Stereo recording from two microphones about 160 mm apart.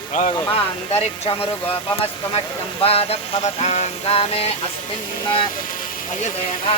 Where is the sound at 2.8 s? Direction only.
40° left (ahead or behind).